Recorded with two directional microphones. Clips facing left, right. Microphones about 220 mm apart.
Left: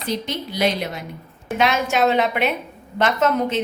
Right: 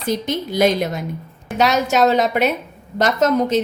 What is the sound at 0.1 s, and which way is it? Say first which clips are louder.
A woman's voice: right 5 dB; 45° right (ahead or behind).